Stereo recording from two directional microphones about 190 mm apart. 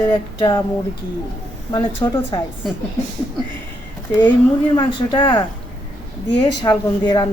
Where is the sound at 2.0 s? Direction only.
25° left (ahead or behind).